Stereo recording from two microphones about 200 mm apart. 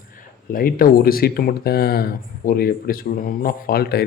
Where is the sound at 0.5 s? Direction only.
45° left (ahead or behind).